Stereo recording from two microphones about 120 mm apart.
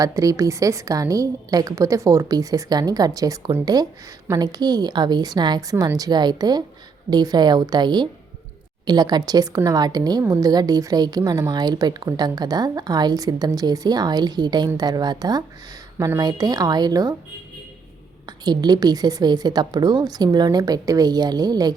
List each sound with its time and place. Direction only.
0.0 s a woman's voice: 30° right (ahead or behind)
18.3 s a woman's voice: 35° right (ahead or behind)